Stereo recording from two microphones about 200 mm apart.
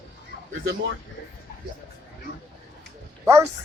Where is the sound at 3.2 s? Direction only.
15° right (ahead or behind).